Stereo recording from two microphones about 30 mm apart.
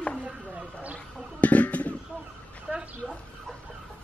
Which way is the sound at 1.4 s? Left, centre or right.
Left.